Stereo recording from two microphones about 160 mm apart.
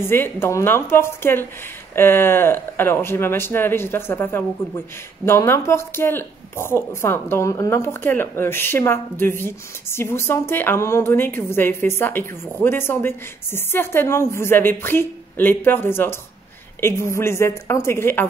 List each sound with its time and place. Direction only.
0.0 s speech: 15° left (ahead or behind)